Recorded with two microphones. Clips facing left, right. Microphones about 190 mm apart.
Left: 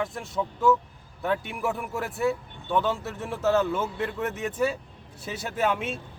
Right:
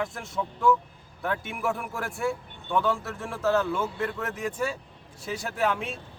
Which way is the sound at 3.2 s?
Centre (ahead or behind).